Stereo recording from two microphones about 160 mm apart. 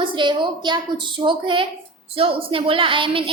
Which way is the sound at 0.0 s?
30° right (ahead or behind).